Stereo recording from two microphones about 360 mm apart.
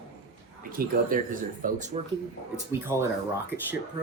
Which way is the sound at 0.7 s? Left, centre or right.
Right.